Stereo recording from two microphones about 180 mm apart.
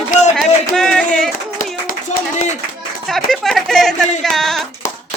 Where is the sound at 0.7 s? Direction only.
5° left (ahead or behind).